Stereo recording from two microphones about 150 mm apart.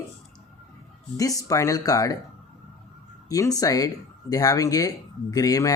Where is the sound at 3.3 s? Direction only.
25° left (ahead or behind).